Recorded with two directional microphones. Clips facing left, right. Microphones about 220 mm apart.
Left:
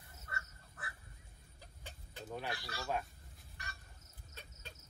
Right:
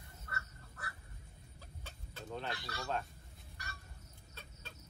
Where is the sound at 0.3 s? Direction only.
20° left (ahead or behind).